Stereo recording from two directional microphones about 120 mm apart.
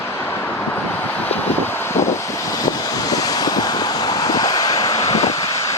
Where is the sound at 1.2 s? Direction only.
15° left (ahead or behind).